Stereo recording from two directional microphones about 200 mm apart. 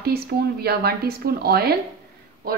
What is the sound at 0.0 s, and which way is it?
Speech, 50° right (ahead or behind).